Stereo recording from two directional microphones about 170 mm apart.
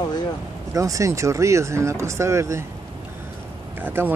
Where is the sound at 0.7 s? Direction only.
20° right (ahead or behind).